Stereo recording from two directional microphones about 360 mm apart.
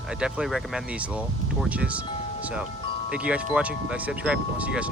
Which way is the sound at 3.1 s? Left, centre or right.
Centre.